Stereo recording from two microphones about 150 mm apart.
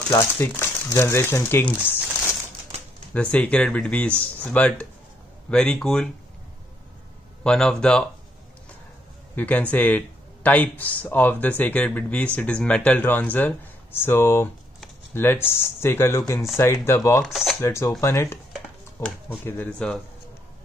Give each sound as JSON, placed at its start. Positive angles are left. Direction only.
{"t": 0.1, "sound": "speech", "side_deg": 15}
{"t": 3.1, "sound": "speech", "side_deg": 10}
{"t": 7.4, "sound": "speech", "side_deg": 5}
{"t": 9.3, "sound": "speech", "side_deg": 10}
{"t": 17.2, "sound": "speech", "side_deg": 0}
{"t": 17.6, "sound": "speech", "side_deg": 20}
{"t": 19.4, "sound": "speech", "side_deg": 10}